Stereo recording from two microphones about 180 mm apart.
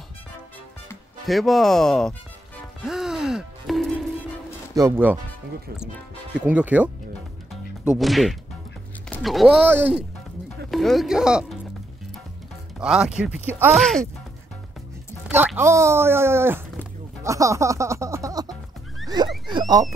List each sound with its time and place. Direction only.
1.2 s speech: centre (ahead or behind)
2.9 s music: 5° right (ahead or behind)
4.7 s speech: 15° right (ahead or behind)
6.3 s speech: 5° right (ahead or behind)
8.0 s speech: centre (ahead or behind)
12.8 s speech: 5° right (ahead or behind)
13.7 s speech: 5° left (ahead or behind)
15.2 s speech: 10° right (ahead or behind)
17.2 s music: 15° right (ahead or behind)
19.0 s a sound: 25° right (ahead or behind)